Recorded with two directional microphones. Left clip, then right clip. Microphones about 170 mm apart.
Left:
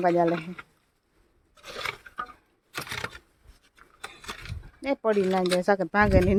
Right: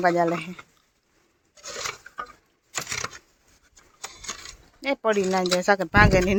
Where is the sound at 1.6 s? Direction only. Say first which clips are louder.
Right 1 dB; 45° left (ahead or behind).